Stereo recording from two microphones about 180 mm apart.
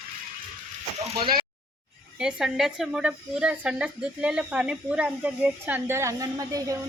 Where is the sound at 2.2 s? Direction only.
5° right (ahead or behind).